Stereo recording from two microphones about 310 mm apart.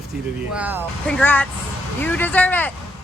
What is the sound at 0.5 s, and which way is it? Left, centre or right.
Speech, centre.